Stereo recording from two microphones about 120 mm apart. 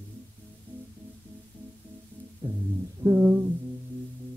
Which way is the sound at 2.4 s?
40° right (ahead or behind).